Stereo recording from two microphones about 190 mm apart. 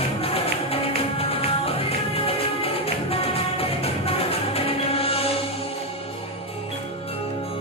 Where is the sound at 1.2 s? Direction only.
30° left (ahead or behind).